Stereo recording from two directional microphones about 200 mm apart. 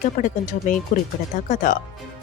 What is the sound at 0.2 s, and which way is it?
Speech, 40° left (ahead or behind).